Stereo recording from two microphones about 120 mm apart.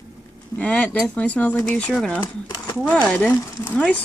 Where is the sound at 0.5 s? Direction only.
10° left (ahead or behind).